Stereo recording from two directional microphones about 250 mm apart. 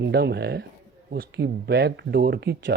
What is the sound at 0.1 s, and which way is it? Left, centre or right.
Speech, right.